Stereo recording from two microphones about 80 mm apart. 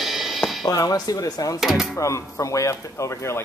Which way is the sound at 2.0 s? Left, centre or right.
Left.